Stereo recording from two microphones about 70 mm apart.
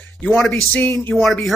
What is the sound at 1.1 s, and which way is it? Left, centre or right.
Speech, centre.